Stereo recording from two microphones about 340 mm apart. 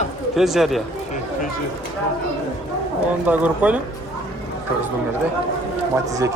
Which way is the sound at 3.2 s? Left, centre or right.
Centre.